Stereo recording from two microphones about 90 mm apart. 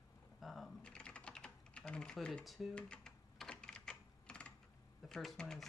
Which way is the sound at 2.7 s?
10° left (ahead or behind).